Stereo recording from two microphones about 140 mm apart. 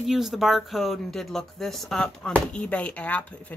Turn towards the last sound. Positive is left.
turn(degrees=10)  # may be behind; listen again after turning